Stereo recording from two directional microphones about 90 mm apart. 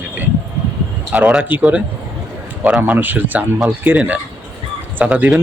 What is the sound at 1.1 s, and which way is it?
Speech, 10° right (ahead or behind).